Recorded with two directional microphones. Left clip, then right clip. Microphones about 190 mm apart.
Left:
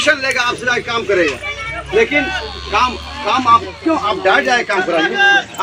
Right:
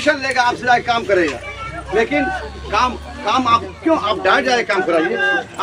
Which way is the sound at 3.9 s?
5° right (ahead or behind).